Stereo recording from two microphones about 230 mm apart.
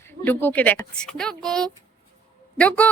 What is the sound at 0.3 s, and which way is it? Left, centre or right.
Speech, centre.